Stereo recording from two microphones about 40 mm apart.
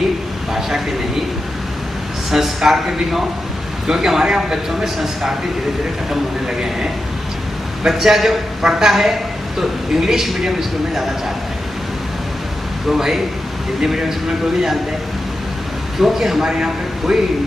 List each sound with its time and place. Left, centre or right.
0.6 s a man's voice: centre
2.3 s a man's voice: centre
7.8 s a man's voice: centre
12.9 s a man's voice: centre
16.0 s a man's voice: centre